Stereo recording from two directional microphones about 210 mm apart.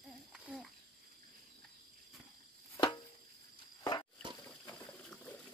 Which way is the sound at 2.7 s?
20° left (ahead or behind).